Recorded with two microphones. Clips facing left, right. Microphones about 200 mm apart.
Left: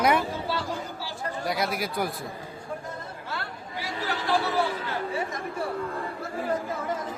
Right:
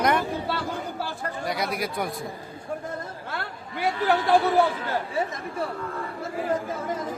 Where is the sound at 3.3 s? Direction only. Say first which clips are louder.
Right 1 dB; 55° right (ahead or behind).